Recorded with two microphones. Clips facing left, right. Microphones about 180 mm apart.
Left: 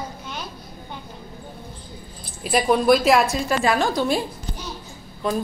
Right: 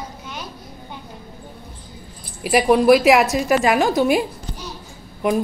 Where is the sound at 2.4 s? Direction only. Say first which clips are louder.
Right 4 dB; 10° right (ahead or behind).